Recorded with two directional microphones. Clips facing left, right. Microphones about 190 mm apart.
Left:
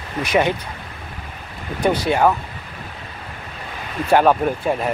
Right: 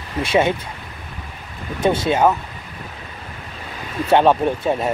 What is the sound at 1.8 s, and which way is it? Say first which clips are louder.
Speech: right 1 dB; 25° right (ahead or behind).